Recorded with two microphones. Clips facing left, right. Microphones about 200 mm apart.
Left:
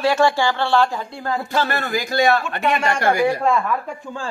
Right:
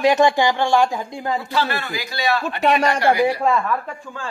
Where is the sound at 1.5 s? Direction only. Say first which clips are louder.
Left 2 dB; 45° left (ahead or behind).